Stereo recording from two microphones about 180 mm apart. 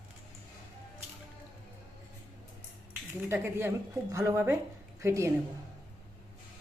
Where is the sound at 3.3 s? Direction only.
15° right (ahead or behind).